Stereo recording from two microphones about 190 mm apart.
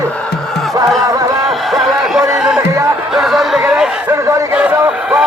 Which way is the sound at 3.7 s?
5° right (ahead or behind).